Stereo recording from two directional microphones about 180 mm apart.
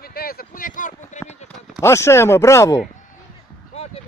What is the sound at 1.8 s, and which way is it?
A man's voice, 15° left (ahead or behind).